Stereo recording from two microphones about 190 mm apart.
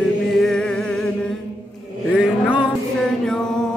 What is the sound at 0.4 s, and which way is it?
Music, 5° left (ahead or behind).